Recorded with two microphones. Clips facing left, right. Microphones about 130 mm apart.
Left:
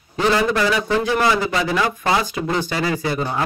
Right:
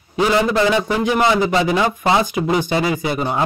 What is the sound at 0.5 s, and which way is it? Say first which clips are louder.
A man's voice: right 2 dB; 25° right (ahead or behind).